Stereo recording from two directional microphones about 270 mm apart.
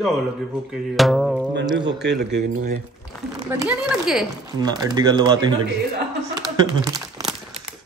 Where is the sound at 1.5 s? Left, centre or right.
Right.